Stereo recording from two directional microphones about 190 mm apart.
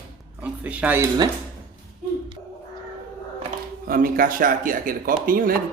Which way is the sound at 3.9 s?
50° right (ahead or behind).